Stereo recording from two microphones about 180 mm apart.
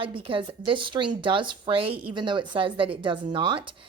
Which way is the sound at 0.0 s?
30° right (ahead or behind).